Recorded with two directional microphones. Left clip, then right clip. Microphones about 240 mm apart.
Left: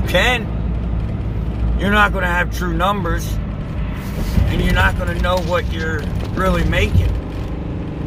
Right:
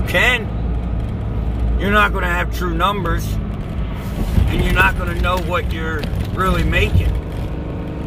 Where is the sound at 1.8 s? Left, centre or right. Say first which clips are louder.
Even; centre.